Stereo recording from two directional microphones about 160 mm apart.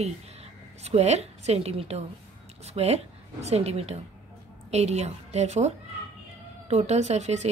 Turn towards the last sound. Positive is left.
turn(degrees=-45)  # may be behind; listen again after turning